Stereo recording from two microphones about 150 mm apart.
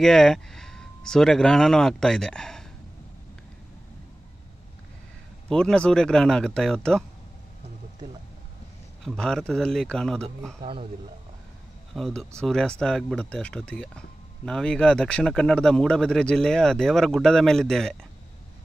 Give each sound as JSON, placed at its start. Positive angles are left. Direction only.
{"t": 0.0, "sound": "speech", "side_deg": 5}
{"t": 5.5, "sound": "speech", "side_deg": 5}
{"t": 9.0, "sound": "speech", "side_deg": 5}
{"t": 10.6, "sound": "a man's voice", "side_deg": -35}
{"t": 11.9, "sound": "speech", "side_deg": 0}